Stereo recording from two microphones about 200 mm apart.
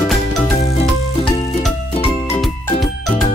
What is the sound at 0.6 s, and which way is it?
Music, 35° left (ahead or behind).